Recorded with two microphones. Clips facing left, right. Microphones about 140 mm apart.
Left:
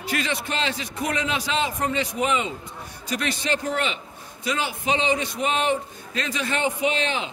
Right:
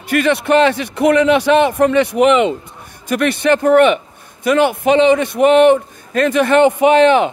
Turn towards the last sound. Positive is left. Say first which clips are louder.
# right 15 dB
turn(degrees=-60)  # may be behind; listen again after turning